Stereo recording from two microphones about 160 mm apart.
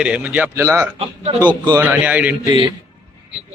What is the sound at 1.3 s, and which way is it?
Speech, 35° right (ahead or behind).